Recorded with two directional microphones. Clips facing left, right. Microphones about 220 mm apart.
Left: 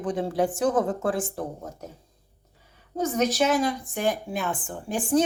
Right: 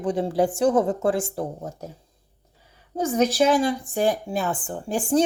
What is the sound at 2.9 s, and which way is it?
A woman's voice, 30° right (ahead or behind).